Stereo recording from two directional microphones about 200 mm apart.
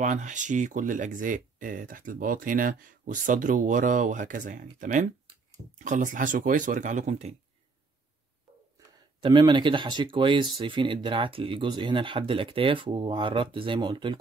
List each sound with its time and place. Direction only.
0.0 s speech: 40° right (ahead or behind)
9.2 s speech: 25° right (ahead or behind)